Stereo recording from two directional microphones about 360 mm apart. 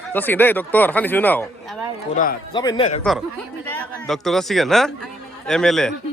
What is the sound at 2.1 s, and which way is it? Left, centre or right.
Speech, left.